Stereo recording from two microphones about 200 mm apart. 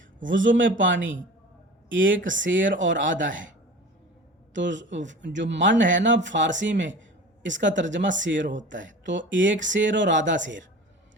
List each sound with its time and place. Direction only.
0.3 s speech: 70° right (ahead or behind)
4.5 s speech: 65° right (ahead or behind)